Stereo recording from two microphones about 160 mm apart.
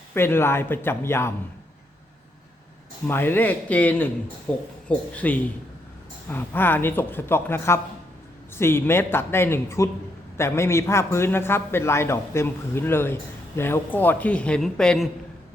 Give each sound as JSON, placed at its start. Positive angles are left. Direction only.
{"t": 0.1, "sound": "a man's voice", "side_deg": 15}
{"t": 3.1, "sound": "a man's voice", "side_deg": 15}